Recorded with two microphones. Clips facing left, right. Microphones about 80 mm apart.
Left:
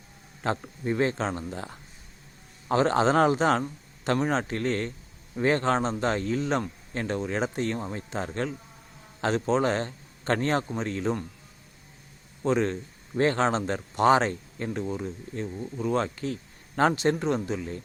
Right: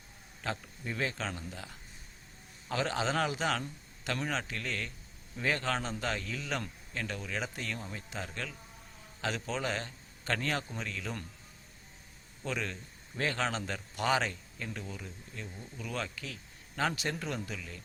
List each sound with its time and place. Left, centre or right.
0.4 s a man's voice: left
12.4 s a man's voice: left